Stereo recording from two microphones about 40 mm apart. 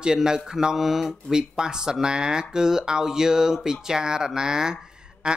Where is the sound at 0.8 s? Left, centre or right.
Centre.